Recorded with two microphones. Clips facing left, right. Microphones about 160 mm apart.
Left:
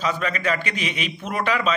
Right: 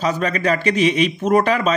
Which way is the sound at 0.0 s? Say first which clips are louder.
Right 5 dB; 40° right (ahead or behind).